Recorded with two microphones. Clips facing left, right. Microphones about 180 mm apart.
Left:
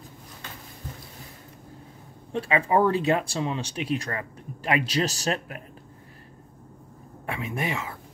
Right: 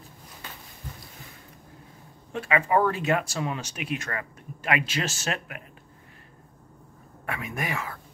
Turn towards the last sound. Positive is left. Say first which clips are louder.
# left 2 dB
turn(degrees=25)  # may be behind; listen again after turning